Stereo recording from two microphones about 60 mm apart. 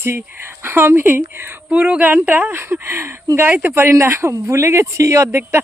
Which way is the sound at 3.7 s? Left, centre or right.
Right.